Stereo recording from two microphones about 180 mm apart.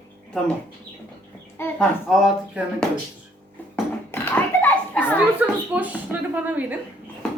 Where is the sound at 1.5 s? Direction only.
10° left (ahead or behind).